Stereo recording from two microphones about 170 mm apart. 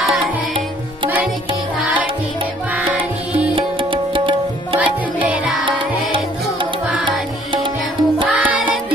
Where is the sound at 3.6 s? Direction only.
30° right (ahead or behind).